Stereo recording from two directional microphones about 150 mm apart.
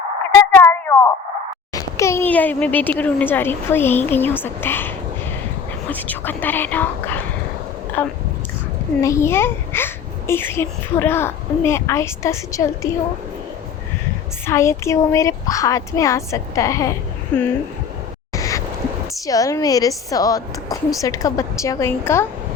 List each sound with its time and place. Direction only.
0.5 s a sound: 15° left (ahead or behind)
1.7 s a child's voice: 20° left (ahead or behind)
5.9 s a child's voice: 10° left (ahead or behind)
14.4 s a woman's voice: 20° left (ahead or behind)
18.3 s a sound: 20° left (ahead or behind)
19.2 s a woman's voice: 25° left (ahead or behind)